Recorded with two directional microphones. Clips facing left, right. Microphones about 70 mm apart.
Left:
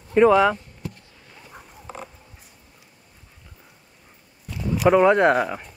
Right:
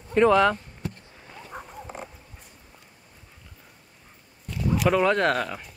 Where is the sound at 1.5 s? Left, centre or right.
Centre.